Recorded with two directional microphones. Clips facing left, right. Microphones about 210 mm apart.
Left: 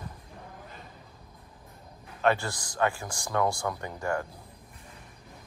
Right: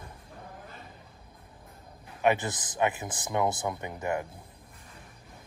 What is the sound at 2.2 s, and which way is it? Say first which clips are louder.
Speech: even; 20° right (ahead or behind).